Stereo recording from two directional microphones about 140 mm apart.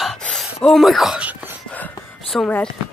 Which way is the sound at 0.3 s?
Centre (ahead or behind).